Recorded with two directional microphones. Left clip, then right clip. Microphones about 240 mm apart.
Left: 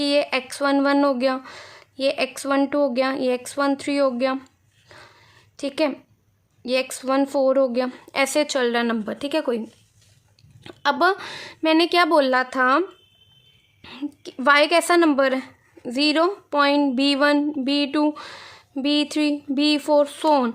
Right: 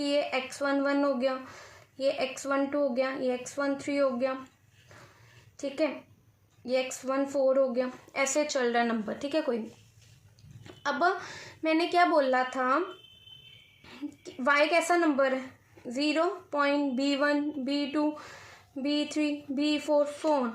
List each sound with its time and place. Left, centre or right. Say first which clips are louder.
0.0 s speech: left 8 dB; left
5.5 s speech: left 7 dB; left
10.6 s speech: left 8 dB; left
13.8 s speech: left 9 dB; left